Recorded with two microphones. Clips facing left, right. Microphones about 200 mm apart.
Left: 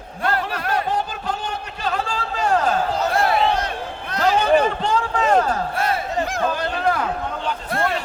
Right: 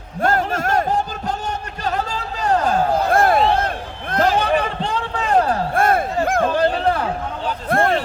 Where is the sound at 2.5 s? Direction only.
50° right (ahead or behind).